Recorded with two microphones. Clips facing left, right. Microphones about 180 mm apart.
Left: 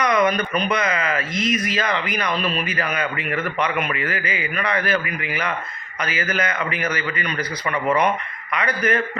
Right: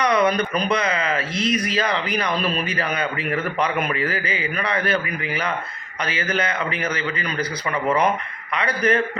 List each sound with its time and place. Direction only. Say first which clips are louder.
0.0 s speech: even; 30° right (ahead or behind)